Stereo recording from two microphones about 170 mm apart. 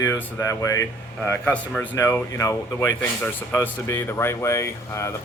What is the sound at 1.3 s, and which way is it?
Speech, 10° left (ahead or behind).